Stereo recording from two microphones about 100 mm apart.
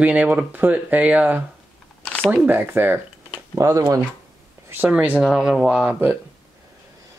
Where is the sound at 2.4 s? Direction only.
20° right (ahead or behind).